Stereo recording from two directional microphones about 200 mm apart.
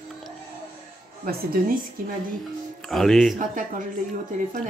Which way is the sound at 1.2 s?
45° right (ahead or behind).